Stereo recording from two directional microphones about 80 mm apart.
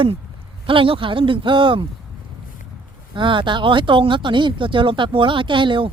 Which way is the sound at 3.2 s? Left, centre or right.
Right.